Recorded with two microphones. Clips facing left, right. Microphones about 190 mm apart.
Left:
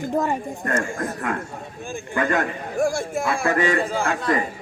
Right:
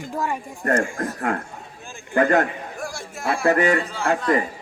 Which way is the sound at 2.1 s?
40° right (ahead or behind).